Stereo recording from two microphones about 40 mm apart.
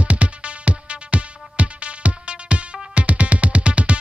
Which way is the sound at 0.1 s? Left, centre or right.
Right.